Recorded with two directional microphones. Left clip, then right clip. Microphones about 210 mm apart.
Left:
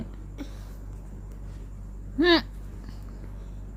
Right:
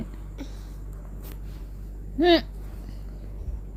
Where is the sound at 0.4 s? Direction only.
15° left (ahead or behind).